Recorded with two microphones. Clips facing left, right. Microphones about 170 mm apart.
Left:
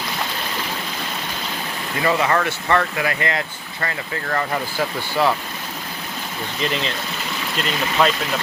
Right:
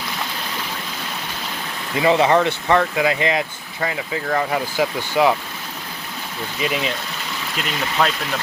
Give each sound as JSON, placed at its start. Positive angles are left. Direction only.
{"t": 2.0, "sound": "speech", "side_deg": -20}
{"t": 6.6, "sound": "speech", "side_deg": -10}